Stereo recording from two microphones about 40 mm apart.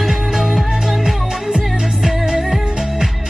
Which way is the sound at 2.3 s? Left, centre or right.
Centre.